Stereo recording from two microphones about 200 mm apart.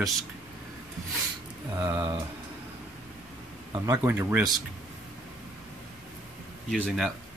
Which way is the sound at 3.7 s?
15° right (ahead or behind).